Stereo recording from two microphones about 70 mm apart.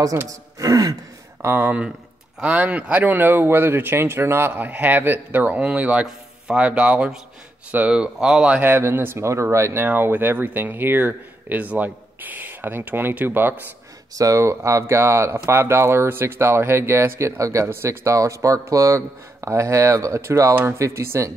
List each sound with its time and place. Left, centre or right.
0.6 s throat clearing: right
1.4 s speech: right; by 8.5 s centre
8.5 s speech: right
9.8 s speech: right
14.1 s speech: right